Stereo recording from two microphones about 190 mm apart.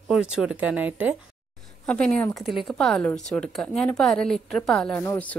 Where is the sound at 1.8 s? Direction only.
5° left (ahead or behind).